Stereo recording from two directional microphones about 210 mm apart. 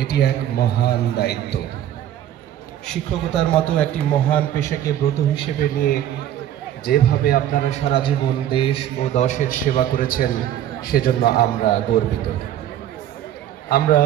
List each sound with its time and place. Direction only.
0.0 s a man's voice: 50° left (ahead or behind)
2.9 s a man's voice: 5° left (ahead or behind)
5.6 s a man's voice: 45° left (ahead or behind)
7.7 s a man's voice: 25° left (ahead or behind); by 12.0 s 45° left (ahead or behind)
13.7 s a man's voice: 45° left (ahead or behind)